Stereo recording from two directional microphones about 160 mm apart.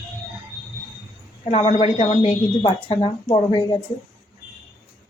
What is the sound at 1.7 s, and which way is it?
Speech, 40° left (ahead or behind).